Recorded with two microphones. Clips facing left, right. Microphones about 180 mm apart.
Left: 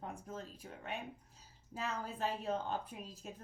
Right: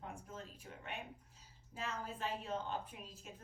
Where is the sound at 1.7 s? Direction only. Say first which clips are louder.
Left 3 dB; 40° left (ahead or behind).